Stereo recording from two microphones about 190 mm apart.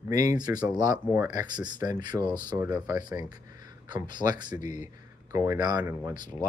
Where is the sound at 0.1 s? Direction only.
15° right (ahead or behind).